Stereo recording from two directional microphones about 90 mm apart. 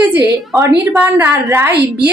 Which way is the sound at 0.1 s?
20° right (ahead or behind).